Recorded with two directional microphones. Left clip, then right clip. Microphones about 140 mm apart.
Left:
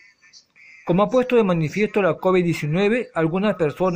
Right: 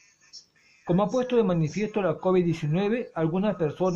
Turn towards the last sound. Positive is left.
turn(degrees=40)  # may be behind; listen again after turning